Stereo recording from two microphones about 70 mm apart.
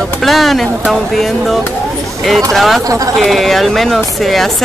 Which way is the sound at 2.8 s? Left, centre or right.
Right.